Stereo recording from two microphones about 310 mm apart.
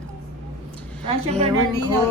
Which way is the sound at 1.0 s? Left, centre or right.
Centre.